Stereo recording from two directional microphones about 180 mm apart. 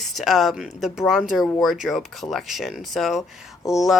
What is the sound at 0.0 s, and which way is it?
Speech, centre (ahead or behind).